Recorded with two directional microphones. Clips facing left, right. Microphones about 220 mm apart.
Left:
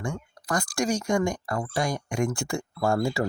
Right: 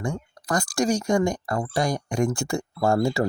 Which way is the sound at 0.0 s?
35° right (ahead or behind).